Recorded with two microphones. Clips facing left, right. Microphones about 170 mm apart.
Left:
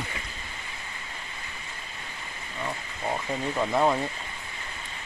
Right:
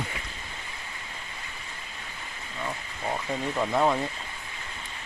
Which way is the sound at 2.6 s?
5° left (ahead or behind).